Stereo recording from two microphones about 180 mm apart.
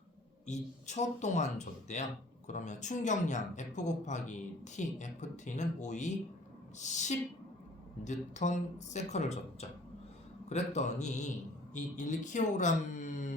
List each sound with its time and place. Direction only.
0.4 s speech: 40° left (ahead or behind)